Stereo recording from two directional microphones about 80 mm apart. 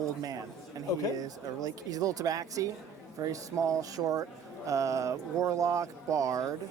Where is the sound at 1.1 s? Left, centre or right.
Right.